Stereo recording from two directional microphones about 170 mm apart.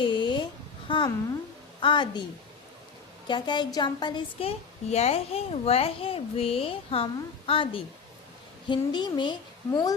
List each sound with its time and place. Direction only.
0.0 s a sound: 25° left (ahead or behind)
0.9 s a woman's voice: 30° left (ahead or behind)
3.2 s a woman's voice: 25° left (ahead or behind)